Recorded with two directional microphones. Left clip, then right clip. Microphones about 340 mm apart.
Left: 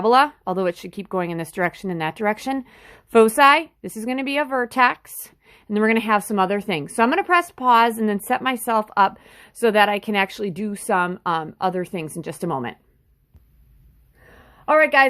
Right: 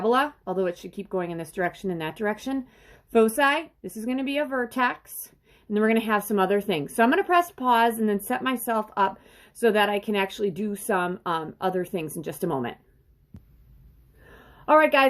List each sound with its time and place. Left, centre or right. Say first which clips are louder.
0.0 s speech: left 7 dB; left
14.7 s speech: left 3 dB; centre